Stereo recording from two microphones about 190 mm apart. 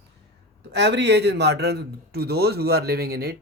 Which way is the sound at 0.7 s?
65° right (ahead or behind).